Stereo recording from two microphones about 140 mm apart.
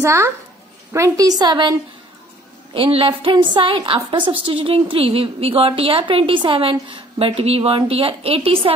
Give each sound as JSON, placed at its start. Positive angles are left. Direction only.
{"t": 0.0, "sound": "a woman's voice", "side_deg": -20}